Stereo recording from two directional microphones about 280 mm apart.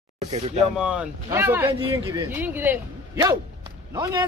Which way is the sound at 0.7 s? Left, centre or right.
Centre.